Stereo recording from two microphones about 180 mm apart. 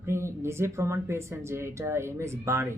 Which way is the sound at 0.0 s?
15° right (ahead or behind).